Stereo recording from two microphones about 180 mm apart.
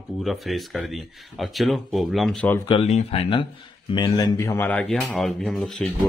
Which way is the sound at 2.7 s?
35° left (ahead or behind).